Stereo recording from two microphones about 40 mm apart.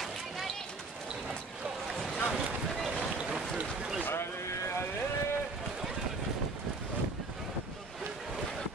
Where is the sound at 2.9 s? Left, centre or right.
Centre.